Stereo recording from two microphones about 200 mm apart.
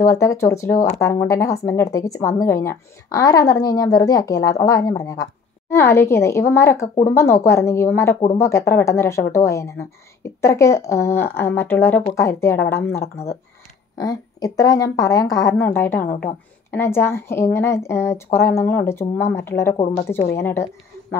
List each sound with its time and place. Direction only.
0.0 s a woman's voice: 15° left (ahead or behind)